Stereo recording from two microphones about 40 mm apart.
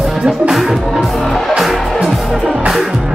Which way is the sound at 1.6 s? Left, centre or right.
Centre.